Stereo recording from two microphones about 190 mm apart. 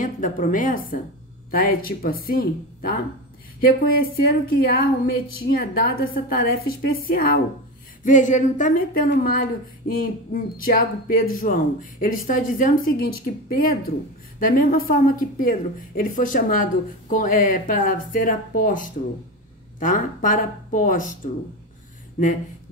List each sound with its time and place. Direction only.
0.0 s speech: 45° left (ahead or behind)